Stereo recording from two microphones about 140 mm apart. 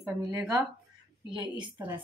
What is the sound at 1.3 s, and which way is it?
Speech, 35° right (ahead or behind).